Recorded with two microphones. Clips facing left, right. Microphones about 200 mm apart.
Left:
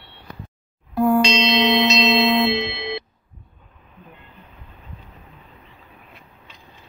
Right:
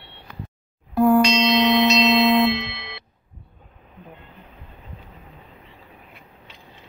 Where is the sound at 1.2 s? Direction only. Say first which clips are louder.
Right 1 dB; 25° left (ahead or behind).